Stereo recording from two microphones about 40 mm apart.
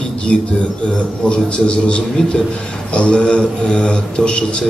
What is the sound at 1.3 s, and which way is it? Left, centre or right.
Speech, left.